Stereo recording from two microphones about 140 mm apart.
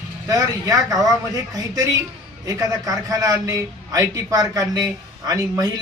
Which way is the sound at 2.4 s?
25° right (ahead or behind).